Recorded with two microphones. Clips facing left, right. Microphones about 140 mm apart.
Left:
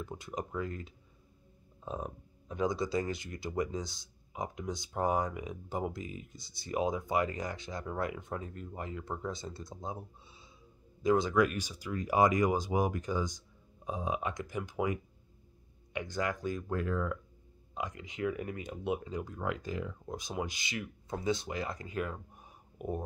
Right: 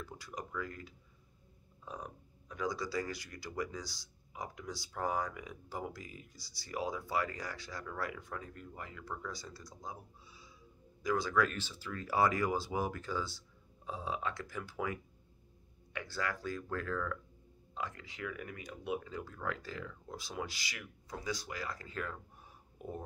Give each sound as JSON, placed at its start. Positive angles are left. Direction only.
{"t": 0.0, "sound": "speech", "side_deg": 20}